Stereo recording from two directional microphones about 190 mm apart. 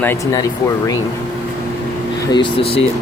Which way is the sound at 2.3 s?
25° left (ahead or behind).